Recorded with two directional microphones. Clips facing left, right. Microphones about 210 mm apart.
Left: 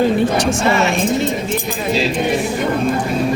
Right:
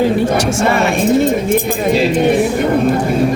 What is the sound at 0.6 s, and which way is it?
Speech, 55° right (ahead or behind).